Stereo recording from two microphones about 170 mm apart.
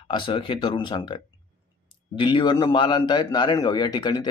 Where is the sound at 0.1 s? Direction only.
30° left (ahead or behind).